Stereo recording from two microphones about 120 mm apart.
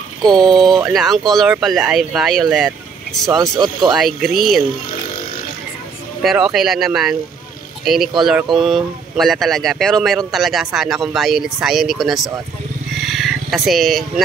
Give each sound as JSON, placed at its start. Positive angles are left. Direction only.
{"t": 0.3, "sound": "speech", "side_deg": 0}
{"t": 3.5, "sound": "speech", "side_deg": -35}
{"t": 3.9, "sound": "speech", "side_deg": 0}
{"t": 6.2, "sound": "speech", "side_deg": -5}
{"t": 13.0, "sound": "a sound", "side_deg": 0}